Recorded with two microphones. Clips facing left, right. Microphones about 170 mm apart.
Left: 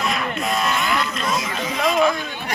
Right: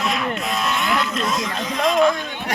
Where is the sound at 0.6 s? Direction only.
Centre (ahead or behind).